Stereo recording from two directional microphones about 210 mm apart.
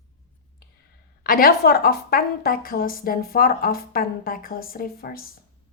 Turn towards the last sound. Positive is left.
turn(degrees=45)  # may be behind; listen again after turning